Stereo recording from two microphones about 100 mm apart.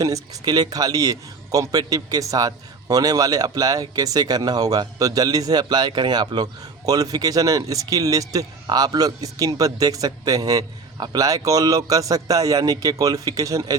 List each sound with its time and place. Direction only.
0.0 s a man's voice: 40° right (ahead or behind)